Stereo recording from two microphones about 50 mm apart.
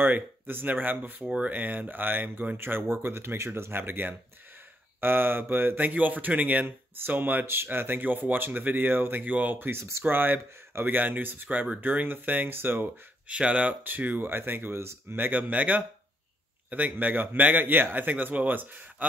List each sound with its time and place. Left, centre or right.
0.0 s speech: right
5.8 s speech: right
7.4 s speech: right
11.0 s speech: right
11.4 s speech: right
13.3 s speech: right
15.2 s speech: right